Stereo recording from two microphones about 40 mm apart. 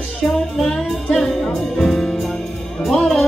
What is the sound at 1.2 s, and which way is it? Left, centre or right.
Music, centre.